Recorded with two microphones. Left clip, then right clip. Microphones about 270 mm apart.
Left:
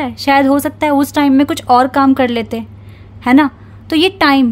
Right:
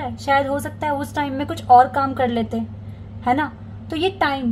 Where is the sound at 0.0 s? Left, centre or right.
Left.